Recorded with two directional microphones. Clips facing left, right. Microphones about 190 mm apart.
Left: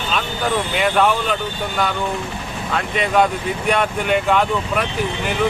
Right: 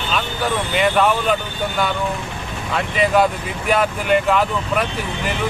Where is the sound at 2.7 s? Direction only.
Centre (ahead or behind).